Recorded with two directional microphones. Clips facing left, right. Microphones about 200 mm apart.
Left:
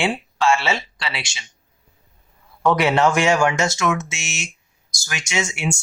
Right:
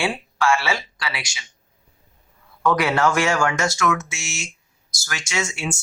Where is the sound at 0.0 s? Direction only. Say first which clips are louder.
Left 2 dB; 25° left (ahead or behind).